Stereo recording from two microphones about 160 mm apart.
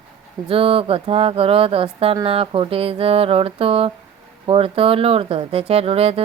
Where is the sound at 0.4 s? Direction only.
35° right (ahead or behind).